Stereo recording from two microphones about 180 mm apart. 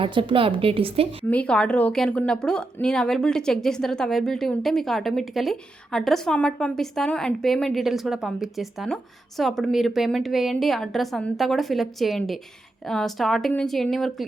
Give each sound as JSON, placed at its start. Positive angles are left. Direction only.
{"t": 0.0, "sound": "a woman's voice", "side_deg": -30}
{"t": 1.3, "sound": "speech", "side_deg": 5}